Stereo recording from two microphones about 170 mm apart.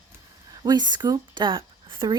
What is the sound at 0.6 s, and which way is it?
Speech, 25° right (ahead or behind).